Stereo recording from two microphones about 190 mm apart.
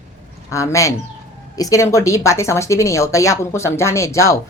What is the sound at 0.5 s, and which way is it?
Speech, 15° left (ahead or behind).